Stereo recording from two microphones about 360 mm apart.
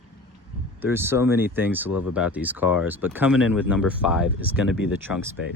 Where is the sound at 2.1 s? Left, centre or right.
Centre.